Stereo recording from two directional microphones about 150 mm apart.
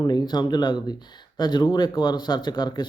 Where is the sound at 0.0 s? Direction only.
25° left (ahead or behind).